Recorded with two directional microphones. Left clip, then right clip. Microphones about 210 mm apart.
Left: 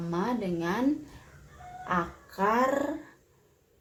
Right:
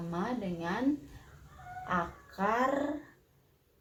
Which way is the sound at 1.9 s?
30° left (ahead or behind).